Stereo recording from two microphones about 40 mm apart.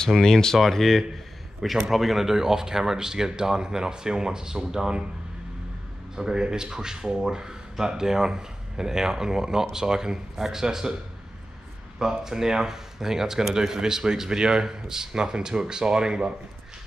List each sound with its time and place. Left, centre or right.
0.1 s speech: centre
6.1 s speech: centre
12.0 s speech: centre